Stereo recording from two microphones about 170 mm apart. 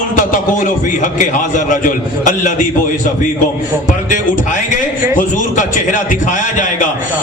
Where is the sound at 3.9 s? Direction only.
50° left (ahead or behind).